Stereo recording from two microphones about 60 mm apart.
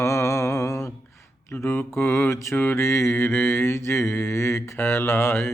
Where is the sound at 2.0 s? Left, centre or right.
Left.